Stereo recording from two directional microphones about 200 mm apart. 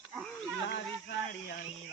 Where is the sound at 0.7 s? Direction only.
60° left (ahead or behind).